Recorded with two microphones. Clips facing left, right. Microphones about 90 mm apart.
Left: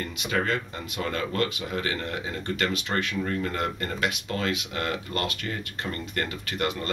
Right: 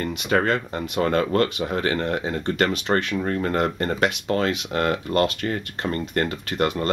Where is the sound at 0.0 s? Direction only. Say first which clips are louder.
Right 6 dB; 45° right (ahead or behind).